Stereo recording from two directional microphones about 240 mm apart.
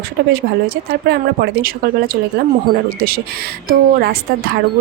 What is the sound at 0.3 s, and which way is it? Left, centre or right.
Speech, right.